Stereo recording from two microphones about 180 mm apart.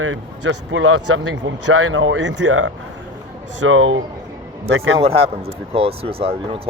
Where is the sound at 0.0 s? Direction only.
90° right.